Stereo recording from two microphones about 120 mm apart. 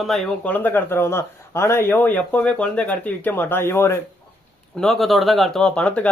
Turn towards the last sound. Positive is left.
turn(degrees=10)  # may be behind; listen again after turning